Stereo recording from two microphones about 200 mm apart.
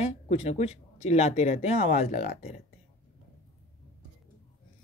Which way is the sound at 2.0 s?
45° left (ahead or behind).